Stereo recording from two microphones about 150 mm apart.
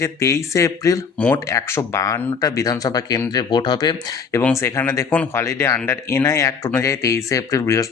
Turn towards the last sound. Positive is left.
turn(degrees=20)  # may be behind; listen again after turning